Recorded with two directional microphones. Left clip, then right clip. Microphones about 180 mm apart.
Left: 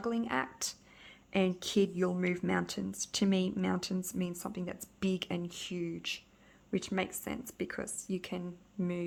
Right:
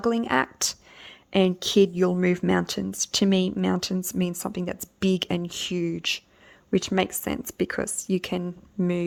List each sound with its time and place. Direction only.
0.0 s speech: 45° right (ahead or behind)